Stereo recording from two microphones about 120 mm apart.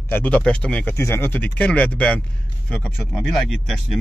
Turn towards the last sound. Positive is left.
turn(degrees=0)  # may be behind; listen again after turning